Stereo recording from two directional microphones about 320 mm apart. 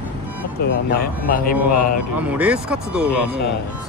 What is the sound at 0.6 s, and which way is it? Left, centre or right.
Speech, left.